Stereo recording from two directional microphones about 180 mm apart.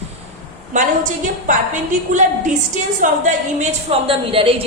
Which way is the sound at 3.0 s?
45° right (ahead or behind).